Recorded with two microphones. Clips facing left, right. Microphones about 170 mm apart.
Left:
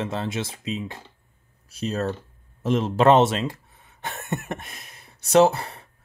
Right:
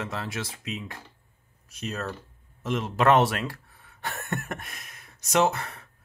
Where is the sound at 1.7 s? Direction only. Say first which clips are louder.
Left 7 dB; 35° left (ahead or behind).